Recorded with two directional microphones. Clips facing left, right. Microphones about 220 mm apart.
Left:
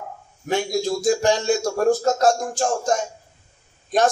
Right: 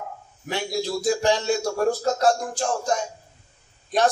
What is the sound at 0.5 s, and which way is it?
Speech, 45° left (ahead or behind).